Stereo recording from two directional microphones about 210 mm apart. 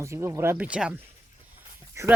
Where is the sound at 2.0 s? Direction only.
15° right (ahead or behind).